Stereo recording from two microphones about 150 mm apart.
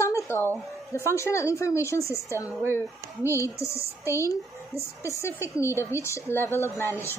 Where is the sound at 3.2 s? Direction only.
20° right (ahead or behind).